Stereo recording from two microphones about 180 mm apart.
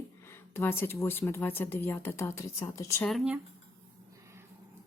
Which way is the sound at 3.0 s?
Centre (ahead or behind).